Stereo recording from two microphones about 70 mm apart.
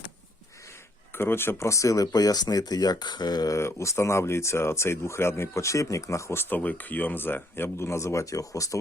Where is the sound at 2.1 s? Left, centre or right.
Left.